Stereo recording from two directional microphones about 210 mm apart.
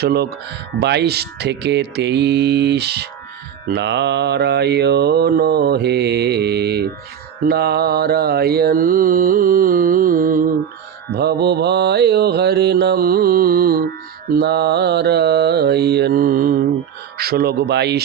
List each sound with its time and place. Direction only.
0.0 s mantra: 50° right (ahead or behind)